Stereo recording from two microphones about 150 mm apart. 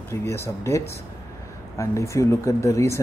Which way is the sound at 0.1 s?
15° left (ahead or behind).